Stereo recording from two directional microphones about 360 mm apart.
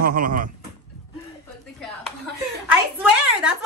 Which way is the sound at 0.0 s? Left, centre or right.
Right.